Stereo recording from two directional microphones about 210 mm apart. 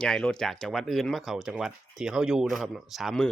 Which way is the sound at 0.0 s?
5° left (ahead or behind).